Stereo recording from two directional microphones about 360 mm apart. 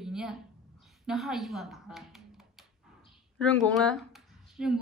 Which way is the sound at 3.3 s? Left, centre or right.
Centre.